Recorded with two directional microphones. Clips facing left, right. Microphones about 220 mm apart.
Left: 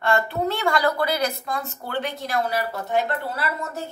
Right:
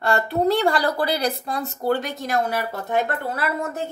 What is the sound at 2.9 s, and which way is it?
Speech, 50° right (ahead or behind).